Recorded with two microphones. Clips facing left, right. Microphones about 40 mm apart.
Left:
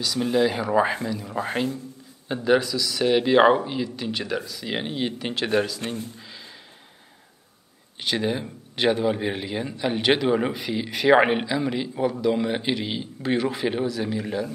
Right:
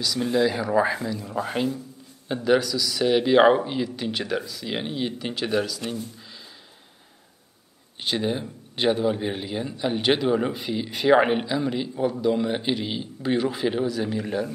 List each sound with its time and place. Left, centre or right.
0.0 s a man's voice: centre
1.1 s a man's voice: centre
5.8 s speech: left
8.2 s a man's voice: centre